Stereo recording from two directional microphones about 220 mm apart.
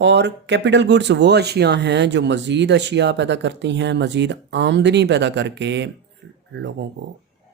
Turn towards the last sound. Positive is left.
turn(degrees=-50)  # may be behind; listen again after turning